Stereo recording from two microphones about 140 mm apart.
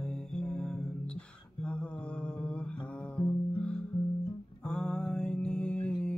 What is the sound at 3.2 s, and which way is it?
Music, 5° left (ahead or behind).